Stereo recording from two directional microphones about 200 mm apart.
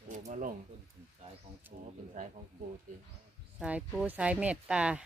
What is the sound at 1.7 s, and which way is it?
Speech, 40° right (ahead or behind).